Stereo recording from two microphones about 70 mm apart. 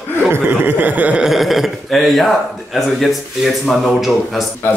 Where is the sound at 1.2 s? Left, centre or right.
Centre.